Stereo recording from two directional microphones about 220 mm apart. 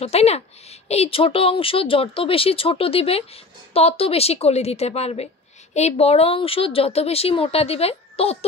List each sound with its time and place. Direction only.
0.0 s a woman's voice: 30° left (ahead or behind)